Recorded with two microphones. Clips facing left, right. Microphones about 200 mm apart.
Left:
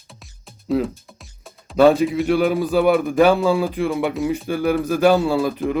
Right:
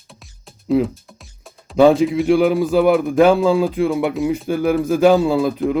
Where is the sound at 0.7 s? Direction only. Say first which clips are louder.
Right 4 dB; centre (ahead or behind).